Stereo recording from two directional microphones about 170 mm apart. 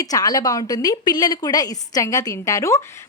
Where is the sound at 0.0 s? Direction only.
20° left (ahead or behind).